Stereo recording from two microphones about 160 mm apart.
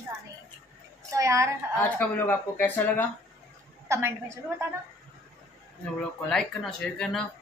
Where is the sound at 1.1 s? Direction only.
20° right (ahead or behind).